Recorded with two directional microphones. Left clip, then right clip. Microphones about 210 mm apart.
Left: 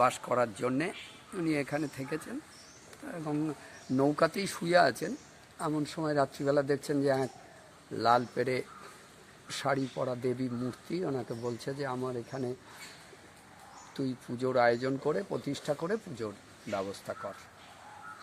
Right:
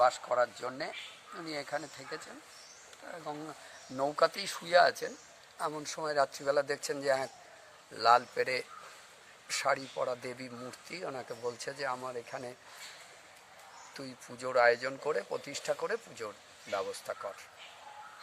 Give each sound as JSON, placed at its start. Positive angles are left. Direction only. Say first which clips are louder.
{"t": 0.0, "sound": "speech", "louder": "even", "side_deg": 40}
{"t": 3.9, "sound": "speech", "louder": "left 2 dB", "side_deg": 10}
{"t": 13.9, "sound": "speech", "louder": "left 9 dB", "side_deg": -10}